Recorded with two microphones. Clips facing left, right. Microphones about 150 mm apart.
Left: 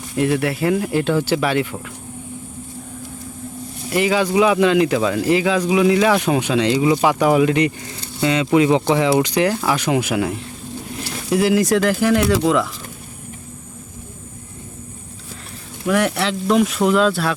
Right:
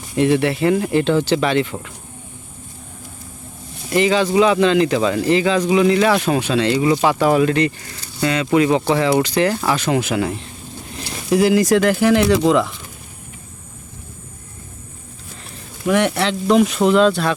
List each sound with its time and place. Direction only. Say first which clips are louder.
0.2 s speech: right 3 dB; centre (ahead or behind)
3.8 s speech: right 2 dB; 10° left (ahead or behind)
15.9 s speech: right 1 dB; centre (ahead or behind)